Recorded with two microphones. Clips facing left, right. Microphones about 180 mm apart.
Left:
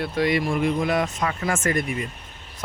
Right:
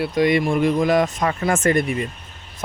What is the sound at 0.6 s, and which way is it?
Speech, 40° right (ahead or behind).